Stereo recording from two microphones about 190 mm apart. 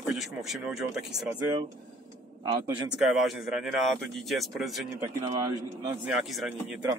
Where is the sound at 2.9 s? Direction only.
Centre (ahead or behind).